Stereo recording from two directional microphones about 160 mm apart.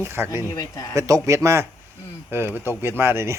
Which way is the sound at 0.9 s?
20° right (ahead or behind).